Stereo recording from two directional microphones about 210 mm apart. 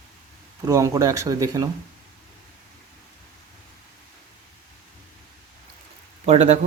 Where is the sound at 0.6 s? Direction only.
15° right (ahead or behind).